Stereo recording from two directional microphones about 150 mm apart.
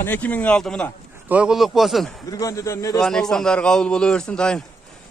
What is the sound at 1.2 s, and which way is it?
Speech, 5° right (ahead or behind).